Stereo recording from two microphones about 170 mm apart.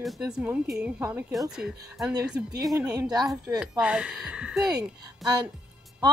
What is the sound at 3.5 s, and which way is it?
Speech, 5° right (ahead or behind).